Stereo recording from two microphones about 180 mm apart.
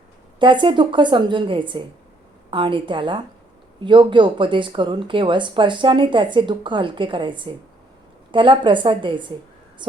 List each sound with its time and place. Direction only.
0.3 s speech: 25° right (ahead or behind)